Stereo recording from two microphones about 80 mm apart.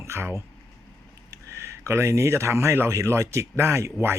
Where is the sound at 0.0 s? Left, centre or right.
Right.